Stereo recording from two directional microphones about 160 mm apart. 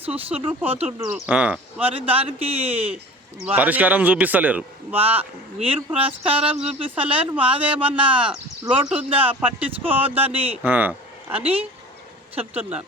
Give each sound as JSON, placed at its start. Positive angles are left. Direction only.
{"t": 0.3, "sound": "speech", "side_deg": -35}
{"t": 1.1, "sound": "speech", "side_deg": -5}
{"t": 1.8, "sound": "speech", "side_deg": -35}
{"t": 3.4, "sound": "speech", "side_deg": -10}
{"t": 4.9, "sound": "speech", "side_deg": -35}
{"t": 10.6, "sound": "speech", "side_deg": -10}
{"t": 11.3, "sound": "speech", "side_deg": -35}